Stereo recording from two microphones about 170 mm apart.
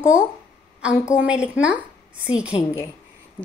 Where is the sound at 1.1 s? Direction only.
5° right (ahead or behind).